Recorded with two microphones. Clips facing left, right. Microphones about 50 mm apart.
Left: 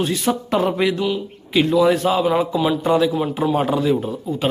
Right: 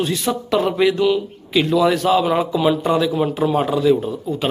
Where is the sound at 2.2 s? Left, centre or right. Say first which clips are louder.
Even; centre.